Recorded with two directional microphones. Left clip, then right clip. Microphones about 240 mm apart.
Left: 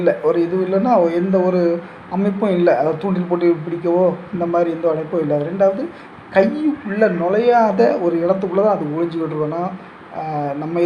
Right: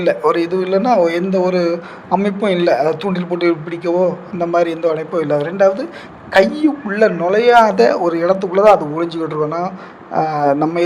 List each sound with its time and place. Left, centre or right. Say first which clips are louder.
0.0 s a man's voice: right 1 dB; right